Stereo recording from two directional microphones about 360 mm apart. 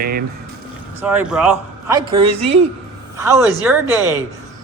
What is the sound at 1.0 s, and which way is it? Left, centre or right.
Speech, centre.